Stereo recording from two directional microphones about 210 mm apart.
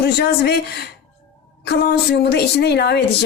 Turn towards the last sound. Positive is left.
turn(degrees=50)  # may be behind; listen again after turning